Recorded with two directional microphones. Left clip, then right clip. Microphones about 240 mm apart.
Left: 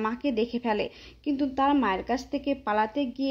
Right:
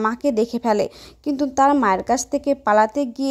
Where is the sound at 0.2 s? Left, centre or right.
Right.